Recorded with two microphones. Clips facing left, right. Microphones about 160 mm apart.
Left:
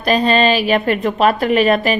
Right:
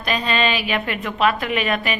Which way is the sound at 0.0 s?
40° left (ahead or behind).